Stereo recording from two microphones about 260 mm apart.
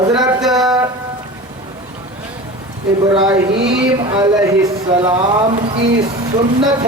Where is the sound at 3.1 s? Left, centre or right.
Centre.